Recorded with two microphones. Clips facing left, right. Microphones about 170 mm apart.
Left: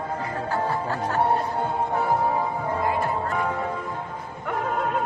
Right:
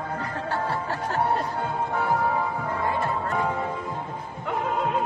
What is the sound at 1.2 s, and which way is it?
Music, 25° left (ahead or behind).